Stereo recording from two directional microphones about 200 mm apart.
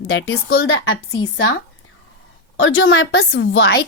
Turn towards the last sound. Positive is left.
turn(degrees=60)  # may be behind; listen again after turning